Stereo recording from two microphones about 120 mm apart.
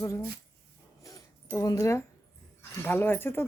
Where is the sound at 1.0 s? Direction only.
25° left (ahead or behind).